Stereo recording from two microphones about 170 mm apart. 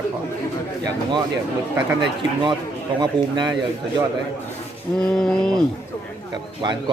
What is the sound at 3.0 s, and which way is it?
Speech, 25° right (ahead or behind).